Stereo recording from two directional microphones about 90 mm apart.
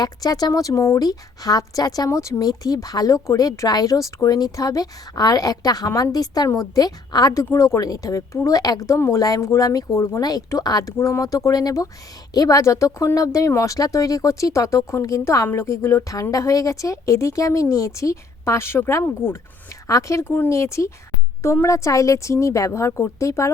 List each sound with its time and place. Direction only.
0.0 s a woman's voice: 45° left (ahead or behind)
7.4 s speech: 30° left (ahead or behind)
9.2 s a woman's voice: 45° left (ahead or behind)
10.9 s speech: 35° left (ahead or behind)